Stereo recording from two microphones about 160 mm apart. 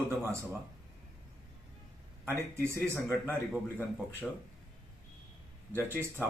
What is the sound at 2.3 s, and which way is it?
Speech, 15° right (ahead or behind).